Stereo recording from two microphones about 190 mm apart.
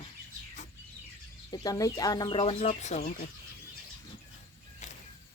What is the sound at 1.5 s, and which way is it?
Speech, 20° left (ahead or behind).